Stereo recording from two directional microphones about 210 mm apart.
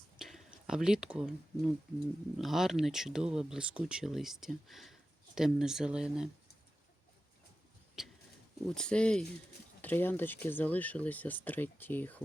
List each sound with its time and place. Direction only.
0.2 s speech: centre (ahead or behind)
8.0 s a sound: centre (ahead or behind)
8.6 s speech: 5° left (ahead or behind)